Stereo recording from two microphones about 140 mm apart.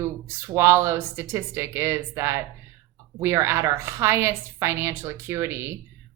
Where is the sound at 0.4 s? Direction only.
20° right (ahead or behind).